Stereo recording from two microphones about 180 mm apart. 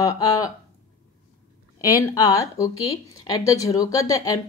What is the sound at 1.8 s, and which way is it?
Speech, 20° left (ahead or behind).